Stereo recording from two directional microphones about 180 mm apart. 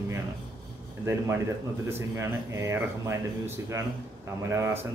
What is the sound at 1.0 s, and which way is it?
Speech, 15° right (ahead or behind).